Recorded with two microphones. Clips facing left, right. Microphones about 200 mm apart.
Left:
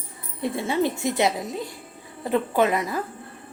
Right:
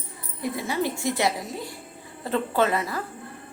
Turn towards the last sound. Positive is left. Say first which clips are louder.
# left 2 dB
turn(degrees=15)  # may be behind; listen again after turning